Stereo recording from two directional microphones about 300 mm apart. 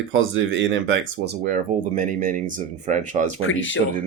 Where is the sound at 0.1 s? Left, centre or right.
Right.